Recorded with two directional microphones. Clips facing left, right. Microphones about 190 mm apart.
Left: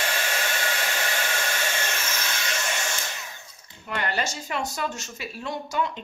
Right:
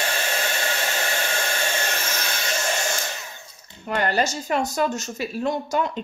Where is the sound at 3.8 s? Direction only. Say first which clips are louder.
Right 6 dB; 40° right (ahead or behind).